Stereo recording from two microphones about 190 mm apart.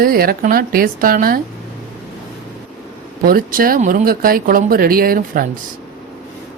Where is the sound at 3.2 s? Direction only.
50° right (ahead or behind).